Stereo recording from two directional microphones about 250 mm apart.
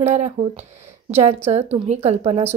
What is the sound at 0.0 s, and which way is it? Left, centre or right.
Speech, right.